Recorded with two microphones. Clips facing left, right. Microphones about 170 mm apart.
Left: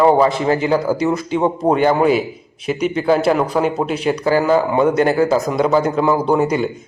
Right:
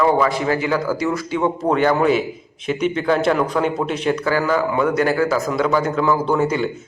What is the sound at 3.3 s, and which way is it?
Speech, 35° left (ahead or behind).